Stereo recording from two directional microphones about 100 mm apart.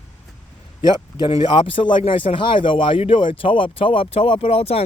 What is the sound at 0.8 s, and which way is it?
Speech, 45° left (ahead or behind).